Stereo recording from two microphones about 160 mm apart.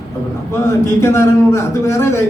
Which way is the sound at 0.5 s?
15° left (ahead or behind).